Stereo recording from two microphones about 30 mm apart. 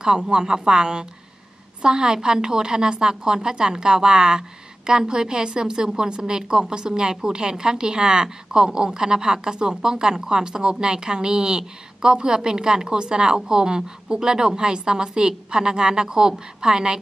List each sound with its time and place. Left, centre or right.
0.0 s a woman's voice: right